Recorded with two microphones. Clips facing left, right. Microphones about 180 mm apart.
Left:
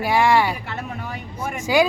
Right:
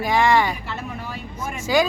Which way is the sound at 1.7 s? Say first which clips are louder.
Left 1 dB; 10° left (ahead or behind).